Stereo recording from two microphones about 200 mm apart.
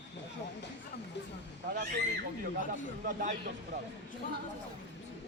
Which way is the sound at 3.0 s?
40° right (ahead or behind).